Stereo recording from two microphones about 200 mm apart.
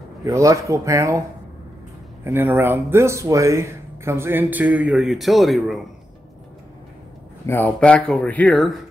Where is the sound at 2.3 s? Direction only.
10° right (ahead or behind).